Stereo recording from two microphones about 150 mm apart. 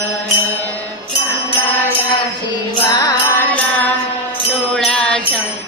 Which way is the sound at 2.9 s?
25° left (ahead or behind).